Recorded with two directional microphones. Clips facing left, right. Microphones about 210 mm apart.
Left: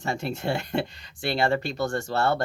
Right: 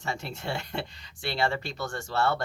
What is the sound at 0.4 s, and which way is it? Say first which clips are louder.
Speech: left 6 dB; 50° left (ahead or behind).